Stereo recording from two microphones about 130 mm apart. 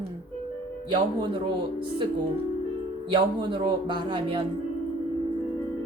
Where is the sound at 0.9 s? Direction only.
35° right (ahead or behind).